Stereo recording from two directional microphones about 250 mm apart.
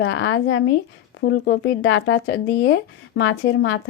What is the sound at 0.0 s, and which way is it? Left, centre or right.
Speech, left.